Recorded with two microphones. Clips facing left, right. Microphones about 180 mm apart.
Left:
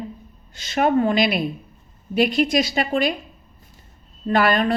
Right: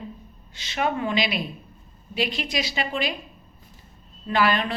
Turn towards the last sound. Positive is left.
turn(degrees=50)  # may be behind; listen again after turning